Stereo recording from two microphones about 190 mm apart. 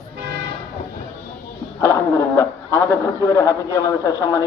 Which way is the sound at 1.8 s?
15° left (ahead or behind).